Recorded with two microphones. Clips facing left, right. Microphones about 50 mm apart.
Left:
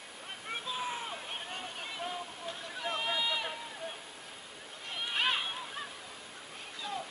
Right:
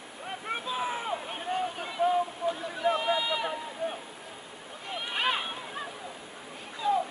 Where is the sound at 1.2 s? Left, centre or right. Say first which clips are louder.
Right 9 dB; centre.